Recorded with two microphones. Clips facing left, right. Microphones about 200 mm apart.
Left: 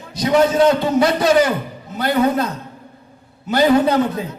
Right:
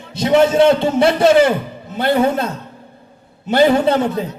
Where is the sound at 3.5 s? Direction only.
30° right (ahead or behind).